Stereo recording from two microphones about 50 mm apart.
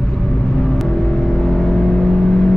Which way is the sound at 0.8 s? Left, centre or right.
Centre.